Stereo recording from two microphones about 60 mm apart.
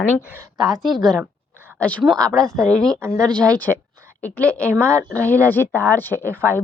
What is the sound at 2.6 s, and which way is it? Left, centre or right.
Speech, centre.